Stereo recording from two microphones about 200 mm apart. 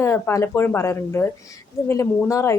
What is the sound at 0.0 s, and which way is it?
A woman's voice, 15° left (ahead or behind).